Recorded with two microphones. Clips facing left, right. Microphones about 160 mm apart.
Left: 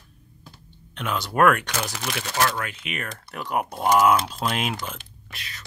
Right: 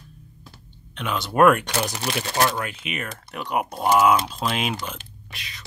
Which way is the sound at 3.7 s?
5° right (ahead or behind).